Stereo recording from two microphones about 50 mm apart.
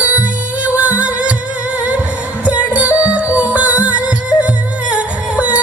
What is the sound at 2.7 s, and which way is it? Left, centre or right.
Music, right.